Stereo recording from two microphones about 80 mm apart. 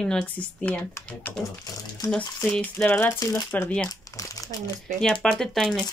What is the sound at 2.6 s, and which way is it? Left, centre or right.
Speech, centre.